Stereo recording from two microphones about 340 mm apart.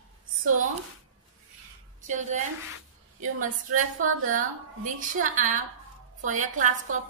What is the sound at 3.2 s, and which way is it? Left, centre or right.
A woman's voice, right.